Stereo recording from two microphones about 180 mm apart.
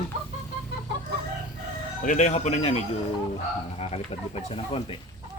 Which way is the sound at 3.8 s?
35° left (ahead or behind).